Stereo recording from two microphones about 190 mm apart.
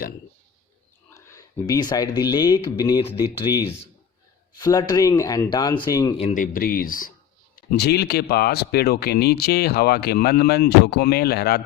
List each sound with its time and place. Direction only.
1.1 s speech: 15° left (ahead or behind)
6.1 s speech: 40° left (ahead or behind); by 11.6 s 55° left (ahead or behind)